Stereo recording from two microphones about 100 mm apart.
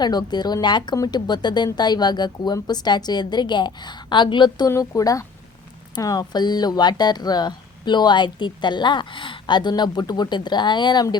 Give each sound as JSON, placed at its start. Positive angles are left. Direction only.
{"t": 0.0, "sound": "speech", "side_deg": 45}
{"t": 4.7, "sound": "speech", "side_deg": 35}